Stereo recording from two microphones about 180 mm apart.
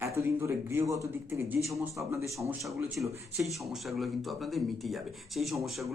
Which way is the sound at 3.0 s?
Centre (ahead or behind).